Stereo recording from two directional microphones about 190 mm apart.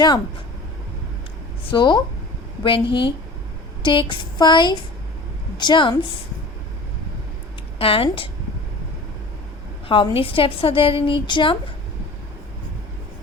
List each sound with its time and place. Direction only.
1.7 s a woman's voice: 25° left (ahead or behind)
7.8 s a woman's voice: 30° left (ahead or behind)
9.9 s a woman's voice: 30° left (ahead or behind)